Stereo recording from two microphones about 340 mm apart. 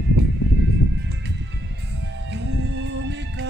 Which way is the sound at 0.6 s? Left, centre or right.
Right.